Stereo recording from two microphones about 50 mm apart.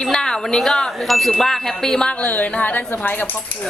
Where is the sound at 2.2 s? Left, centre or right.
Left.